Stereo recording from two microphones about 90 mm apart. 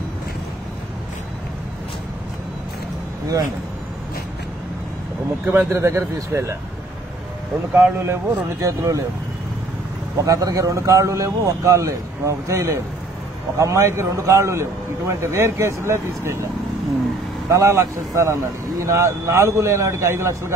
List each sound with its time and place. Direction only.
5.7 s a man's voice: 30° right (ahead or behind)
7.7 s a man's voice: 25° right (ahead or behind)
10.2 s a man's voice: 40° right (ahead or behind)
17.5 s a man's voice: 35° right (ahead or behind)